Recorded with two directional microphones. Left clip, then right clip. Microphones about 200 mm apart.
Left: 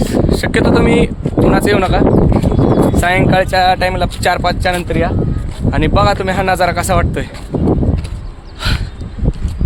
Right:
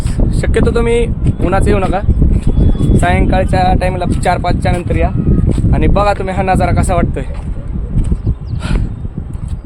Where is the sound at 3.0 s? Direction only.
Centre (ahead or behind).